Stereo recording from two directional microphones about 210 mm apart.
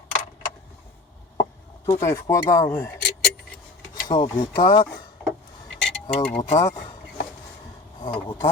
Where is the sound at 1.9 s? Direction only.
15° left (ahead or behind).